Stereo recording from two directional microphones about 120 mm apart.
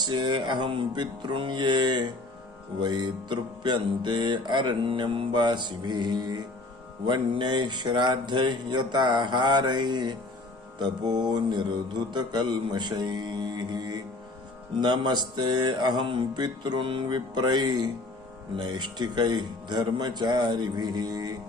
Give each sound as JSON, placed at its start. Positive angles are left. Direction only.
{"t": 0.0, "sound": "music", "side_deg": -40}